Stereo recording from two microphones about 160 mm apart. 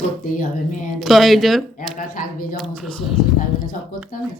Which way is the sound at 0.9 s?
Centre (ahead or behind).